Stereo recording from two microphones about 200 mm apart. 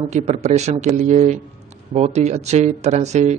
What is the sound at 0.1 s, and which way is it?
Speech, 35° right (ahead or behind).